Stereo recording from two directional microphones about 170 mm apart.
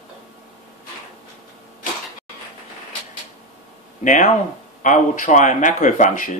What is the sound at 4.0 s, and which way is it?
Speech, 50° left (ahead or behind).